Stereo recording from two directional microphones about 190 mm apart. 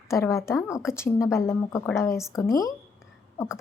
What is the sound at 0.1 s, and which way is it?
A woman's voice, 15° left (ahead or behind).